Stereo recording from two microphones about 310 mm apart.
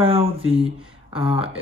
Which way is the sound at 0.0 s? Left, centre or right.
Centre.